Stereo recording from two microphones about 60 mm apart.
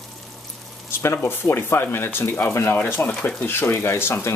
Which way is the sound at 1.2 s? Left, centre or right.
Left.